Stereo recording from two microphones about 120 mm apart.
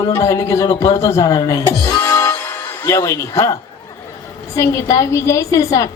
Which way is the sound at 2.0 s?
20° left (ahead or behind).